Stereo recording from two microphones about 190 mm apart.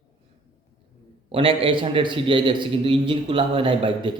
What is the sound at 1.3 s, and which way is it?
A man's voice, 30° right (ahead or behind).